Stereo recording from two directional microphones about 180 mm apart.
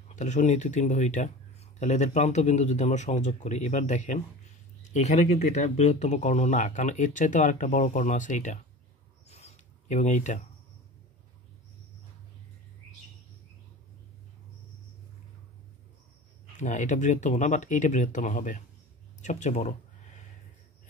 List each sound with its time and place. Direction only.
0.1 s speech: 40° left (ahead or behind)
9.3 s a sound: 40° left (ahead or behind)
16.5 s speech: 45° left (ahead or behind)